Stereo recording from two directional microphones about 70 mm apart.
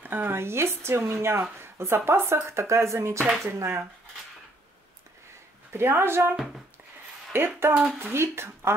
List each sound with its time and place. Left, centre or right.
0.0 s speech: right
5.7 s speech: right
6.3 s speech: centre
7.3 s speech: right